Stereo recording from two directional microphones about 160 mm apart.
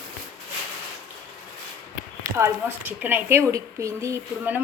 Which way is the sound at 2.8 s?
10° right (ahead or behind).